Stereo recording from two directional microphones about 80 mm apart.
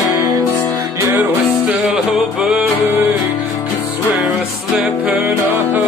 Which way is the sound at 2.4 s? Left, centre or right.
Centre.